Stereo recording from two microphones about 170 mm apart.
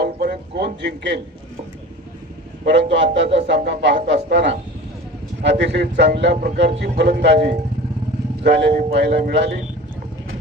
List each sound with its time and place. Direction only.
0.0 s music: 75° right (ahead or behind)
0.8 s a man's voice: 90° right
2.6 s a man's voice: 90° right
6.8 s a man's voice: 75° right (ahead or behind)